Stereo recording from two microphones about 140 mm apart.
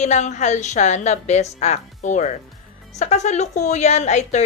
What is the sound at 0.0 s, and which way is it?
A woman's voice, 55° left (ahead or behind).